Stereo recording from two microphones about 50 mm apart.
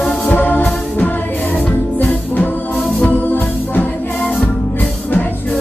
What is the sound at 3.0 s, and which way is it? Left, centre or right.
Music, left.